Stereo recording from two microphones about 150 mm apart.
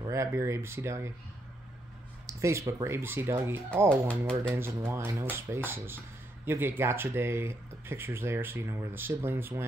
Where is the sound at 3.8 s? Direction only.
10° left (ahead or behind).